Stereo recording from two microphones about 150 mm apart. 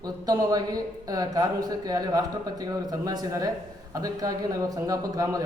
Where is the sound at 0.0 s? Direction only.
25° right (ahead or behind).